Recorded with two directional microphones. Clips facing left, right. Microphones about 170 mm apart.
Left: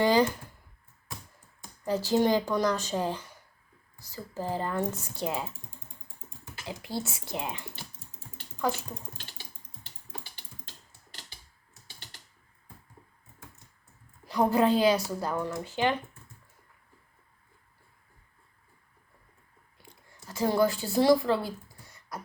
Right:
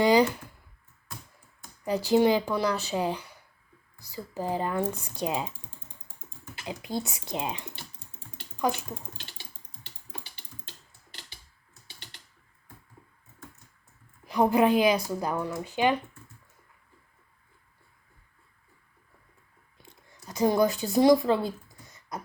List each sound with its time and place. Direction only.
0.0 s computer keyboard: 15° right (ahead or behind)
1.8 s speech: 15° right (ahead or behind)
6.7 s speech: 20° right (ahead or behind)
14.3 s speech: 15° right (ahead or behind)
19.8 s a sound: 20° right (ahead or behind)